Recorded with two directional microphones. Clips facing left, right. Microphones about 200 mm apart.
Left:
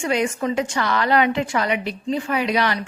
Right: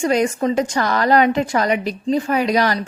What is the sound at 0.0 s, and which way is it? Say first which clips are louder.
A woman's voice: right 4 dB; 40° right (ahead or behind).